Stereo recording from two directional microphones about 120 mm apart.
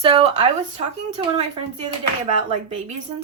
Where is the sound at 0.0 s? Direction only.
50° right (ahead or behind).